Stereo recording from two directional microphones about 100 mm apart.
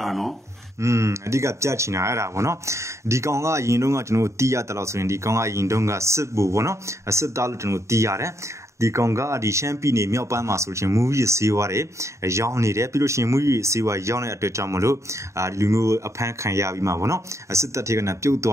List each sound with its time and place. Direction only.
0.0 s speech: centre (ahead or behind)
0.7 s speech: 30° right (ahead or behind)